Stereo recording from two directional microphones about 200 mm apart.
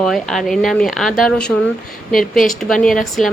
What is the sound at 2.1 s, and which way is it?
Speech, 45° left (ahead or behind).